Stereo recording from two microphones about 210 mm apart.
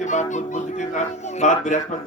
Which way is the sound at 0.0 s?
35° left (ahead or behind).